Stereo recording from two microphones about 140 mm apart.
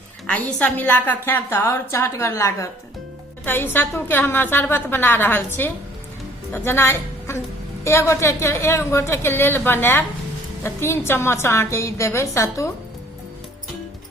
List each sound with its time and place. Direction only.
0.3 s a woman's voice: 10° left (ahead or behind)